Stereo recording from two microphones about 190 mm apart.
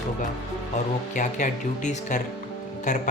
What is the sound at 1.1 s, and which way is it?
Speech, 40° left (ahead or behind).